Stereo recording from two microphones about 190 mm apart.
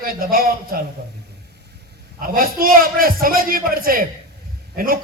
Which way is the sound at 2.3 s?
50° right (ahead or behind).